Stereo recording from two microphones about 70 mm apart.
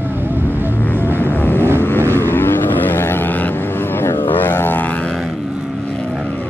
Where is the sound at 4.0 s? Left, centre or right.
Left.